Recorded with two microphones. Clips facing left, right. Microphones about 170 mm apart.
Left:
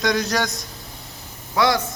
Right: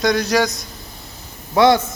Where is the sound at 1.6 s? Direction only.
25° right (ahead or behind).